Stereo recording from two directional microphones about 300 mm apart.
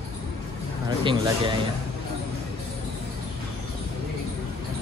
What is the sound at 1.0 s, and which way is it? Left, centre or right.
Speech, centre.